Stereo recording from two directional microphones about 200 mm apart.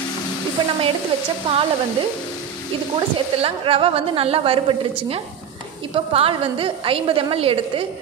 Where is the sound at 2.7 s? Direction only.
30° right (ahead or behind).